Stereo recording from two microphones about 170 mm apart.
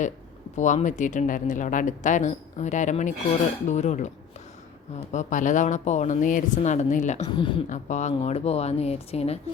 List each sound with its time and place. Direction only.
0.5 s speech: 45° left (ahead or behind)
5.1 s speech: 50° left (ahead or behind)
7.3 s a woman's voice: 30° left (ahead or behind)
7.7 s speech: 45° left (ahead or behind)